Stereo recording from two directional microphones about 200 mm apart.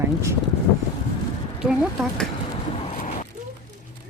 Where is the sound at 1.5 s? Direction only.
5° right (ahead or behind).